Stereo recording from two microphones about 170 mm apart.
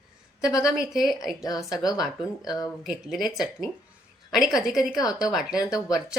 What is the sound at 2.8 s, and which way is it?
Speech, centre (ahead or behind).